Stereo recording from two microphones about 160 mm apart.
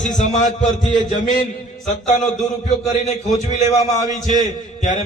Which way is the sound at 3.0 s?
50° left (ahead or behind).